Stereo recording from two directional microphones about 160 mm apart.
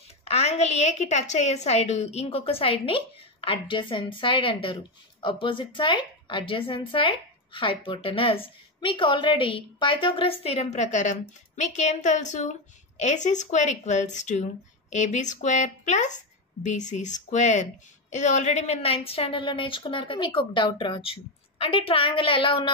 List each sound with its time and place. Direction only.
0.2 s a woman's voice: 40° left (ahead or behind)